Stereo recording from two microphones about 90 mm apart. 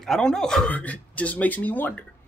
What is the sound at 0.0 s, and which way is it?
Speech, 5° left (ahead or behind).